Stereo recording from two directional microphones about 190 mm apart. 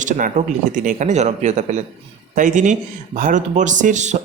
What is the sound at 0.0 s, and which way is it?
Speech, 40° right (ahead or behind).